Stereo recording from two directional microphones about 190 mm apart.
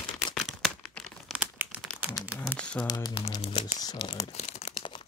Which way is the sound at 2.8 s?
20° left (ahead or behind).